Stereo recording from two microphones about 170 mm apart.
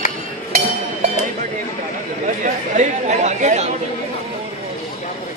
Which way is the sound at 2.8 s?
45° right (ahead or behind).